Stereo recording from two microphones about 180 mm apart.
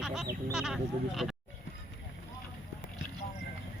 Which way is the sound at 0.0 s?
Centre (ahead or behind).